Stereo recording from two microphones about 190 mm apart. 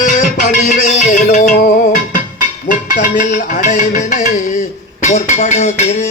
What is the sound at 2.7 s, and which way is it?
Speech, 40° left (ahead or behind).